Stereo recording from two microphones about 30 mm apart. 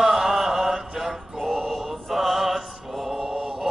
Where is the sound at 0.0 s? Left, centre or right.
Centre.